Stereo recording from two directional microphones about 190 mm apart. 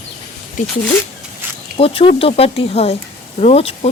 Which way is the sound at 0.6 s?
40° left (ahead or behind).